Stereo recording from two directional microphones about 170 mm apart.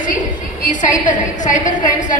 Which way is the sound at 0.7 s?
50° left (ahead or behind).